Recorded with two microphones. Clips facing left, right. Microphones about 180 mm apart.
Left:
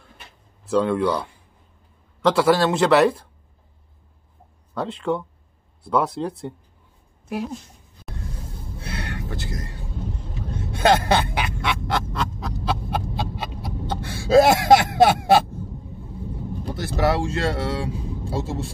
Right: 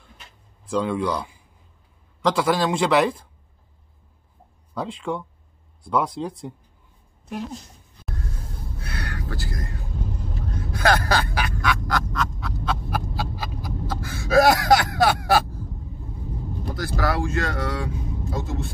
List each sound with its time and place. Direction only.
0.7 s speech: 5° left (ahead or behind)
4.7 s speech: centre (ahead or behind)
8.1 s music: centre (ahead or behind)
8.7 s a sound: 25° left (ahead or behind)
10.6 s music: 25° left (ahead or behind)
12.9 s a sound: 25° left (ahead or behind)
16.7 s speech: 25° left (ahead or behind)